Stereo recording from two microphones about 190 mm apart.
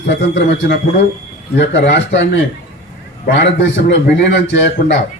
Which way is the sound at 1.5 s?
65° left (ahead or behind).